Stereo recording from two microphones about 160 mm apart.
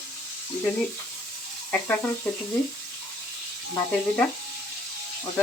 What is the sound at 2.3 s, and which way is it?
Speech, 5° left (ahead or behind).